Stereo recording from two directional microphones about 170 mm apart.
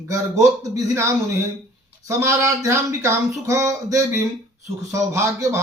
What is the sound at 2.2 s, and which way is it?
Speech, 15° right (ahead or behind).